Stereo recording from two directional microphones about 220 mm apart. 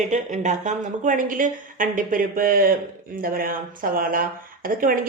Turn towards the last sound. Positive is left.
turn(degrees=-40)  # may be behind; listen again after turning